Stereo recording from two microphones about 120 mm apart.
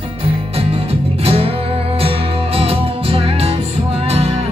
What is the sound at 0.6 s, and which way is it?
Music, 50° right (ahead or behind).